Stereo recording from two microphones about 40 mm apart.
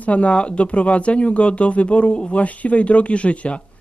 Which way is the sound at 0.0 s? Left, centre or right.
Left.